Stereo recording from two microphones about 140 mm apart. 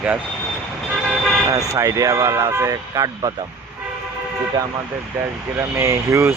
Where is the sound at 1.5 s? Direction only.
25° right (ahead or behind).